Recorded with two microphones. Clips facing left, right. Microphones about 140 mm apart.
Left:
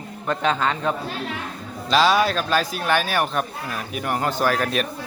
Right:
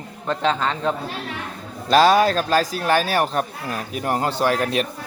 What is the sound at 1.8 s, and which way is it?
Speech, 50° right (ahead or behind).